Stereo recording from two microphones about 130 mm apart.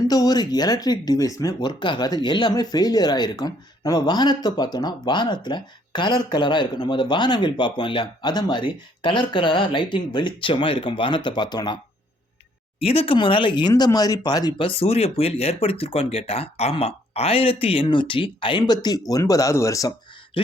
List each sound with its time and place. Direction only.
0.0 s speech: 30° left (ahead or behind)
12.8 s speech: 50° left (ahead or behind); by 19.9 s 25° left (ahead or behind)
20.4 s a sound: 45° left (ahead or behind)